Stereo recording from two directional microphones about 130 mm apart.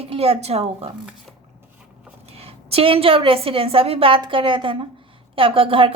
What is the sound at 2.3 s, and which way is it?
A woman's voice, 50° right (ahead or behind).